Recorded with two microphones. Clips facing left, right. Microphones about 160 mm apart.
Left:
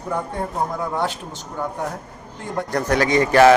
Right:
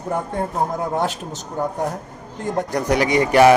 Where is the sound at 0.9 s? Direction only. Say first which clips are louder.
Right 2 dB; 45° right (ahead or behind).